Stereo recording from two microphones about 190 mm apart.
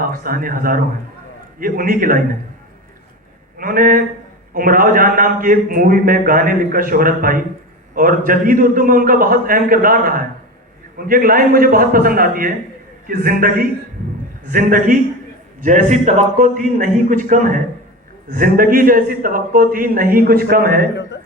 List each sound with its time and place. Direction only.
0.1 s a man's voice: 50° right (ahead or behind)
3.6 s a man's voice: 50° right (ahead or behind)